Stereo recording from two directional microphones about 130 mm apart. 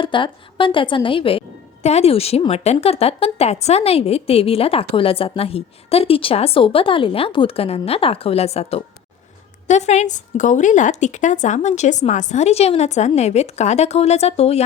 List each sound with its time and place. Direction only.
0.0 s a woman's voice: 40° left (ahead or behind)